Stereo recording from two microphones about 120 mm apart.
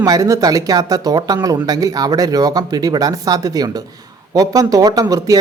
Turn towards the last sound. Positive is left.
turn(degrees=-30)  # may be behind; listen again after turning